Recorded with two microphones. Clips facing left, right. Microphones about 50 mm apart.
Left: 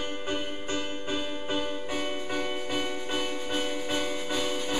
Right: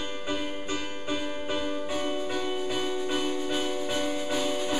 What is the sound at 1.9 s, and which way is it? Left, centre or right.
Music, left.